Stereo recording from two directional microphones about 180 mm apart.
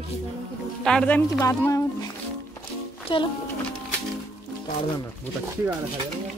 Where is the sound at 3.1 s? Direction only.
30° left (ahead or behind).